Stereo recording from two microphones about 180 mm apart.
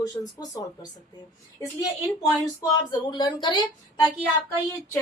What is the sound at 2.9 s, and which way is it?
A woman's voice, 25° left (ahead or behind).